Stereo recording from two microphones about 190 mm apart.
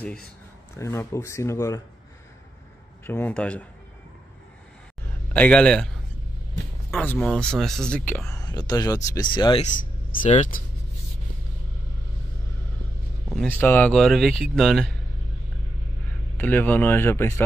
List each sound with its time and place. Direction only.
0.7 s speech: 15° left (ahead or behind)
3.1 s speech: 10° left (ahead or behind)
5.3 s speech: 5° left (ahead or behind)
8.3 s speech: 20° left (ahead or behind)
10.2 s speech: 40° left (ahead or behind)
13.6 s speech: 10° left (ahead or behind)
16.3 s speech: 10° left (ahead or behind)